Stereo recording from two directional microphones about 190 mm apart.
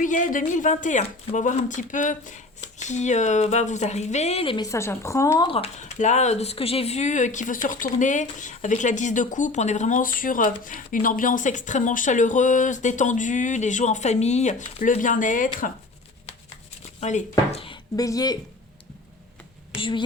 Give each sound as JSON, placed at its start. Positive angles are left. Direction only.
{"t": 0.0, "sound": "speech", "side_deg": 45}
{"t": 5.5, "sound": "speech", "side_deg": 35}
{"t": 17.0, "sound": "speech", "side_deg": 35}